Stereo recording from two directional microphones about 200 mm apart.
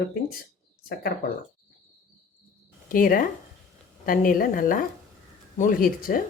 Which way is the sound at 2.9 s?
45° left (ahead or behind).